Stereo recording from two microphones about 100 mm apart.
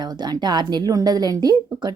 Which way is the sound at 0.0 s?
45° right (ahead or behind).